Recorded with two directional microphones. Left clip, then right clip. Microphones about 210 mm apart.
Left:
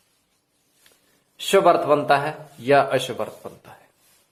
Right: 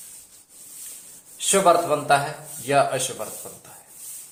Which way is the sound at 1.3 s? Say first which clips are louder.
Left 1 dB; 45° left (ahead or behind).